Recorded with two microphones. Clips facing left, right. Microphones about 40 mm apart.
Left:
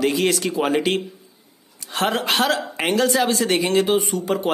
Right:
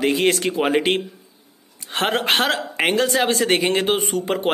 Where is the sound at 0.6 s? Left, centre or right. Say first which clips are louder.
Right 1 dB; right.